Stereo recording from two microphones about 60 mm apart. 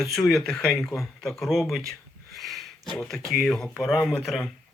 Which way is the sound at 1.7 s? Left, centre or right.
Centre.